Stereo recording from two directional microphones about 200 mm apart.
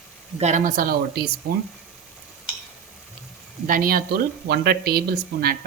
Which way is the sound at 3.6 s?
45° right (ahead or behind).